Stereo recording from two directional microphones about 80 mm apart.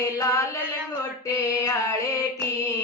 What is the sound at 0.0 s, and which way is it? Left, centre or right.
Chant, left.